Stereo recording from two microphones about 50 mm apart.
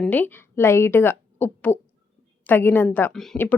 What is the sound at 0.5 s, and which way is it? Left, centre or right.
Speech, left.